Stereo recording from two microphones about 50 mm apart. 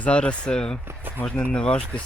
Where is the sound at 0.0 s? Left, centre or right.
Left.